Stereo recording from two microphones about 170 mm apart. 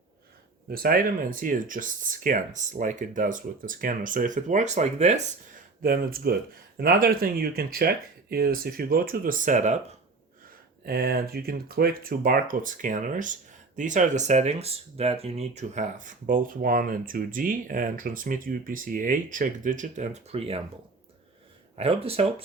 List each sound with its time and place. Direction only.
0.7 s speech: 60° right (ahead or behind); by 5.5 s 40° right (ahead or behind)
5.8 s speech: 60° right (ahead or behind)
10.8 s speech: 65° right (ahead or behind); by 20.6 s 35° right (ahead or behind)
21.8 s speech: 35° right (ahead or behind)